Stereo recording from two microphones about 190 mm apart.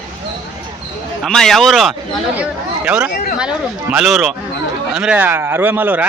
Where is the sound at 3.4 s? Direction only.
5° right (ahead or behind).